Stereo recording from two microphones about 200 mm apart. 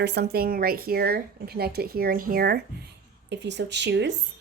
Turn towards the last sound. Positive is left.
turn(degrees=-60)  # may be behind; listen again after turning